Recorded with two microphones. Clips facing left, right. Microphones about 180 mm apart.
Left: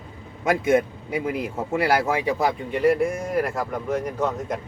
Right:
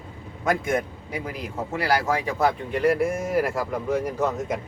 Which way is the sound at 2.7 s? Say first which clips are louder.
Left 1 dB; centre (ahead or behind).